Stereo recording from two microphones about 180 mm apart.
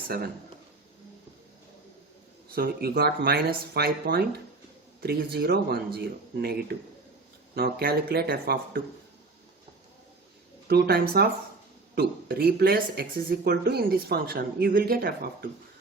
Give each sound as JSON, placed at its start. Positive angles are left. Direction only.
{"t": 2.5, "sound": "speech", "side_deg": -55}
{"t": 10.7, "sound": "speech", "side_deg": -60}